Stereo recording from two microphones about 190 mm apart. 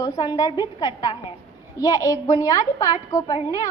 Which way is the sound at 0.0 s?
20° left (ahead or behind).